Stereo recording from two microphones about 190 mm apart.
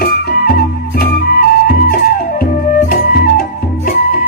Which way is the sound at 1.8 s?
50° left (ahead or behind).